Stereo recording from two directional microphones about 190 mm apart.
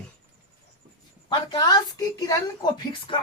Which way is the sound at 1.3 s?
20° left (ahead or behind).